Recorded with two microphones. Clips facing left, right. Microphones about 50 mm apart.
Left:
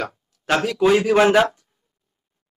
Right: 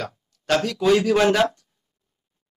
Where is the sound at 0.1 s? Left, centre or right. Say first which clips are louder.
Left 1 dB; centre.